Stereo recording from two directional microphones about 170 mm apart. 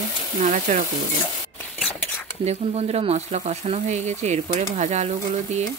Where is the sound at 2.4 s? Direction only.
40° right (ahead or behind).